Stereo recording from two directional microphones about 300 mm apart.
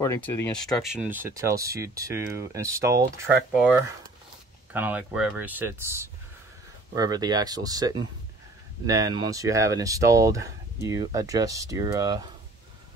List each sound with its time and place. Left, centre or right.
0.0 s speech: centre
3.0 s speech: right
4.7 s speech: centre